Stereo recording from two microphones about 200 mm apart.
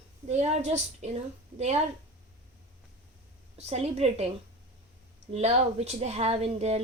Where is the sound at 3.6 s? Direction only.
30° right (ahead or behind).